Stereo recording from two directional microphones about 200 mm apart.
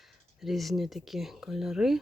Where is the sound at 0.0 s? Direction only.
Centre (ahead or behind).